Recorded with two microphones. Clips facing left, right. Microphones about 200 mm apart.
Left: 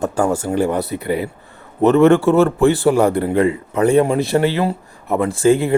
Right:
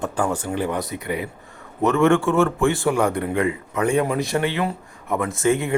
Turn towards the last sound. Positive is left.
turn(degrees=30)  # may be behind; listen again after turning